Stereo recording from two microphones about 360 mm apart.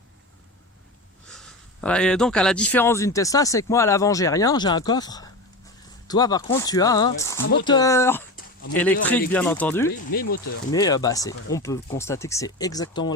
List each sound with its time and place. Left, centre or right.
1.3 s a man's voice: centre
10.1 s speech: left
10.7 s a man's voice: centre